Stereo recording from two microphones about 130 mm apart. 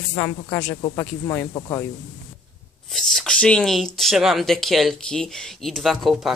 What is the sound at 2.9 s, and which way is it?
Speech, 5° left (ahead or behind).